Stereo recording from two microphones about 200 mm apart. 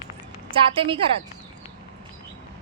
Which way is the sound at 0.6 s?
25° right (ahead or behind).